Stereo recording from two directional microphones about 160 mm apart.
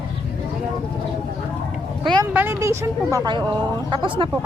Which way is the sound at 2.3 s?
10° right (ahead or behind).